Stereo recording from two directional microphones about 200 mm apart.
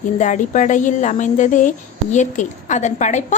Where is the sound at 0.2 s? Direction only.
40° left (ahead or behind).